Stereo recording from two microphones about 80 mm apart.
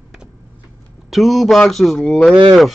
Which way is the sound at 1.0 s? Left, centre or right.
Centre.